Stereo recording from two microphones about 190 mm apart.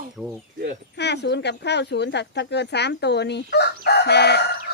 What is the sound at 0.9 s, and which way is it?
Speech, 65° left (ahead or behind).